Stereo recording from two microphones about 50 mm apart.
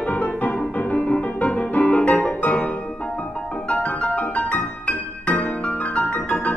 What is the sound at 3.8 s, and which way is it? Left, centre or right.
Music, left.